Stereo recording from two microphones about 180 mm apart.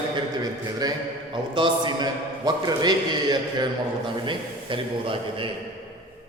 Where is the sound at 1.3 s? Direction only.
25° right (ahead or behind).